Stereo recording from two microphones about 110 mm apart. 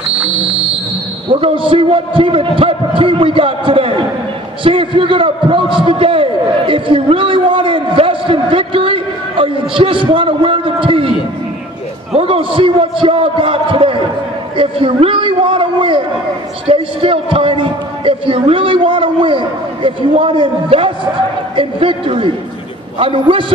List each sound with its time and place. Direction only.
1.3 s a man's voice: 50° right (ahead or behind)
12.1 s a man's voice: 60° right (ahead or behind)